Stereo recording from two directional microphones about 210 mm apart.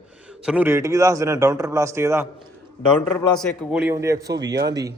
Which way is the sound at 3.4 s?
10° right (ahead or behind).